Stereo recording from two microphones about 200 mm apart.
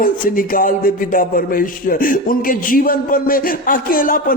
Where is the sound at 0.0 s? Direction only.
45° left (ahead or behind).